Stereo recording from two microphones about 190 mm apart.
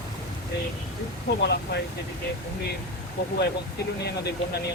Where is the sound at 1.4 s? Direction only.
60° left (ahead or behind).